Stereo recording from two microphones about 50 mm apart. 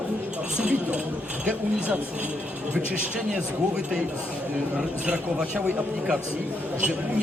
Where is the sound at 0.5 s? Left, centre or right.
Right.